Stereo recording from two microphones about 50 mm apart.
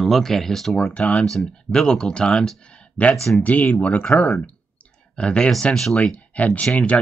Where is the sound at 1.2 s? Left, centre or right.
Centre.